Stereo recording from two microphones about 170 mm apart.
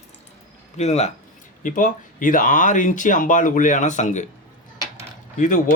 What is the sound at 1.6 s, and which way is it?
Speech, 50° left (ahead or behind).